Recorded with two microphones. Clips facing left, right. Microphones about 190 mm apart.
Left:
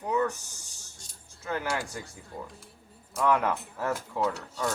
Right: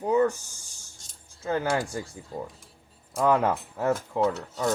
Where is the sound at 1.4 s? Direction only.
30° right (ahead or behind).